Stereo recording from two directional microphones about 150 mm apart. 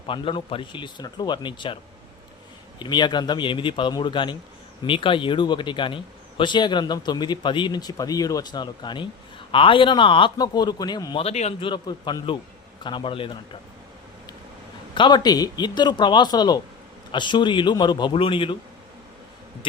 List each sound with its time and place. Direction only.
0.1 s speech: 35° left (ahead or behind)
11.2 s speech: 45° left (ahead or behind)
11.6 s speech: 30° left (ahead or behind)
14.9 s speech: 30° left (ahead or behind)